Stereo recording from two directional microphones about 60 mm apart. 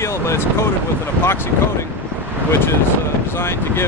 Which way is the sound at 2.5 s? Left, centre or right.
Left.